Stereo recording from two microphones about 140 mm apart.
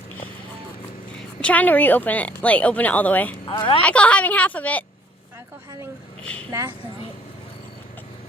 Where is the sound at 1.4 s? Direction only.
10° left (ahead or behind).